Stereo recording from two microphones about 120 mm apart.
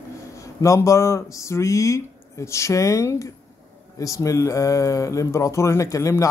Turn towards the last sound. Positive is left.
turn(degrees=25)  # may be behind; listen again after turning